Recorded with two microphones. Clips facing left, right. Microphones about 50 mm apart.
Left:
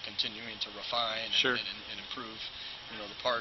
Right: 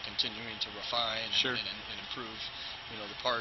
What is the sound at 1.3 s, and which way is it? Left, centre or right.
Speech, centre.